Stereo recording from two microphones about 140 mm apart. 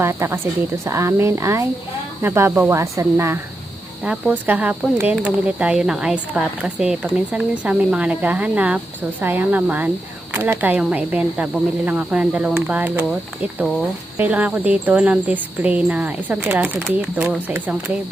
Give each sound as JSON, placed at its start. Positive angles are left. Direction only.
{"t": 0.0, "sound": "speech", "side_deg": -20}
{"t": 4.0, "sound": "speech", "side_deg": -10}
{"t": 14.2, "sound": "speech", "side_deg": -10}